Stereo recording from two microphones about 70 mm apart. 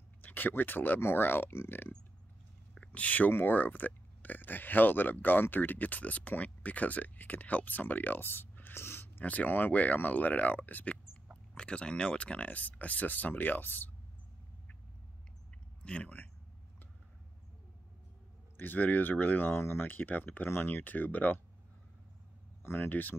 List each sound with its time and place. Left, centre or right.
0.2 s speech: left
2.7 s speech: centre
11.5 s speech: centre
15.8 s speech: centre
18.6 s speech: left
22.6 s speech: left